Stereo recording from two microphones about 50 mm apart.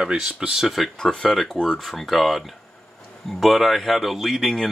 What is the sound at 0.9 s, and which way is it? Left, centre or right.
Speech, centre.